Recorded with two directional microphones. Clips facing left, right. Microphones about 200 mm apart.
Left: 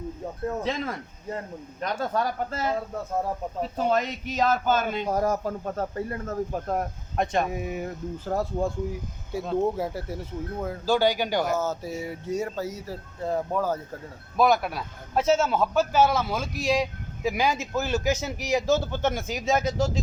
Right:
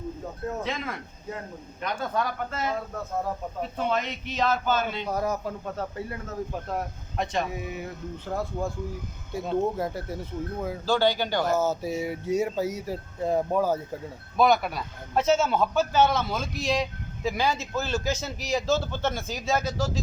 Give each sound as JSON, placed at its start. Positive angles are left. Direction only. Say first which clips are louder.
{"t": 0.6, "sound": "a man's voice", "louder": "left 3 dB", "side_deg": 35}
{"t": 9.3, "sound": "speech", "louder": "left 1 dB", "side_deg": 5}
{"t": 10.8, "sound": "a man's voice", "louder": "left 1 dB", "side_deg": 10}
{"t": 11.5, "sound": "speech", "louder": "right 2 dB", "side_deg": -10}
{"t": 14.3, "sound": "a man's voice", "louder": "even", "side_deg": 5}